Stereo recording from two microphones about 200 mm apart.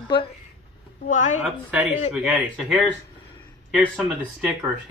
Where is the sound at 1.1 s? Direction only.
40° left (ahead or behind).